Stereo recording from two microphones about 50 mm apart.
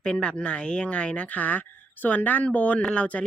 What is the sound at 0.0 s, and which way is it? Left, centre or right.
Speech, centre.